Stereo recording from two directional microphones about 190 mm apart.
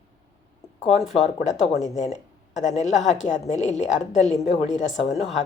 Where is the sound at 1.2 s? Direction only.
40° left (ahead or behind).